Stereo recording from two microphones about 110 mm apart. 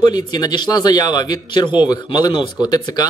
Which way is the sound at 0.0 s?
40° left (ahead or behind).